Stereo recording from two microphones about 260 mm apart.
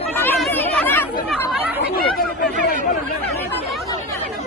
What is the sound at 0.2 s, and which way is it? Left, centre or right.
Chatter, centre.